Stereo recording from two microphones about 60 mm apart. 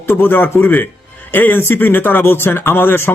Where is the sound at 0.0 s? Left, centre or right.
Left.